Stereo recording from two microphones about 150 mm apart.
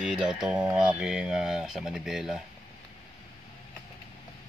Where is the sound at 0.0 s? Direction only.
5° right (ahead or behind).